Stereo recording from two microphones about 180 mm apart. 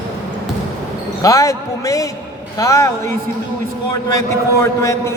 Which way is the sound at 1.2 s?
20° left (ahead or behind).